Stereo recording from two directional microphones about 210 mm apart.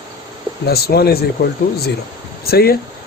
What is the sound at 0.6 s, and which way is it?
Speech, 50° left (ahead or behind).